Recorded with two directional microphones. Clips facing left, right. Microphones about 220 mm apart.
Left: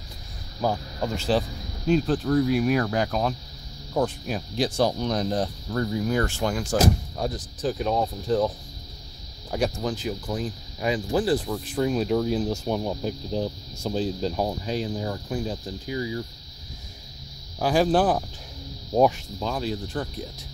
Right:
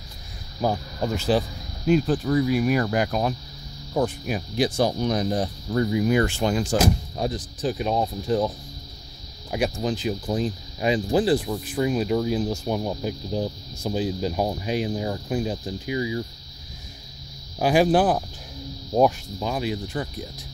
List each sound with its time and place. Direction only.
0.6 s speech: 10° right (ahead or behind)
9.5 s speech: 10° right (ahead or behind)
10.0 s speech: 20° right (ahead or behind)
17.6 s speech: 15° right (ahead or behind)
19.4 s speech: 15° right (ahead or behind)